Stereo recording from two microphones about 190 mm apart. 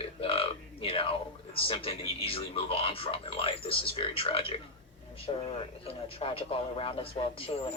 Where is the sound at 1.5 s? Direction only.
30° left (ahead or behind).